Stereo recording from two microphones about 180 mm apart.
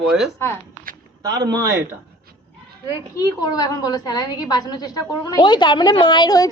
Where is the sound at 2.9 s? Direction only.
20° left (ahead or behind).